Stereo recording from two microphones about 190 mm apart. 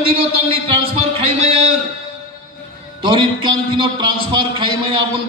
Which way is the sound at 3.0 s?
25° right (ahead or behind).